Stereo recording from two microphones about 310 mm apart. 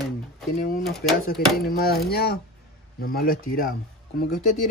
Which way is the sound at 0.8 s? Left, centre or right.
Centre.